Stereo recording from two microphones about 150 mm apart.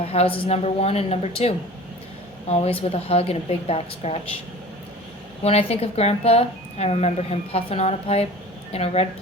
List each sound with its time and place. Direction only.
0.0 s speech: 40° left (ahead or behind)
2.5 s a woman's voice: 40° left (ahead or behind)
5.4 s speech: 45° left (ahead or behind)